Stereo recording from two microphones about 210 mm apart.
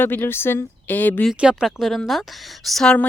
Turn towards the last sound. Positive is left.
turn(degrees=5)  # may be behind; listen again after turning